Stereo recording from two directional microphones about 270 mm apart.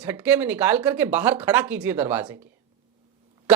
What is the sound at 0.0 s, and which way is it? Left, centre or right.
Speech, centre.